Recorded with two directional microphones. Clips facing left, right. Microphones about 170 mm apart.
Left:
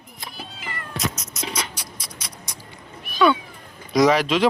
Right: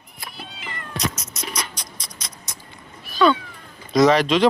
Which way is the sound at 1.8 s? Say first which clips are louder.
Left 1 dB; 10° left (ahead or behind).